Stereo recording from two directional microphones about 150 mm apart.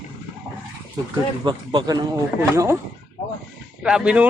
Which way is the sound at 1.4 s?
30° right (ahead or behind).